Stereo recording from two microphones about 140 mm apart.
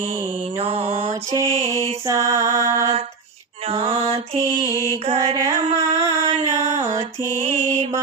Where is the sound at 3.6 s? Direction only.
45° right (ahead or behind).